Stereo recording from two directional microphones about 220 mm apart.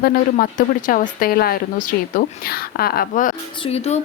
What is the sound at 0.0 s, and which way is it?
A woman's voice, 40° left (ahead or behind).